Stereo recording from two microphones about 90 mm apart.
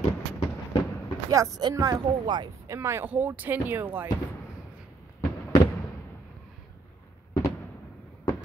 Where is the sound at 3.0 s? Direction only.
20° right (ahead or behind).